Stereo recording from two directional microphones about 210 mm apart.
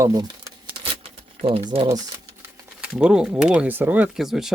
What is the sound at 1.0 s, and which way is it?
Typing, 25° right (ahead or behind).